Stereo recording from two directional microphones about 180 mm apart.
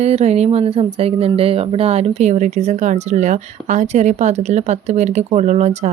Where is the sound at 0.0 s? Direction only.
35° right (ahead or behind).